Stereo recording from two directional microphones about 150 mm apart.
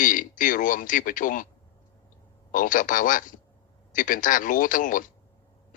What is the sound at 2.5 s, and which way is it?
Speech, 65° left (ahead or behind).